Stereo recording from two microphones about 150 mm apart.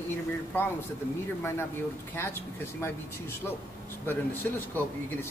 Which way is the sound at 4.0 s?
15° left (ahead or behind).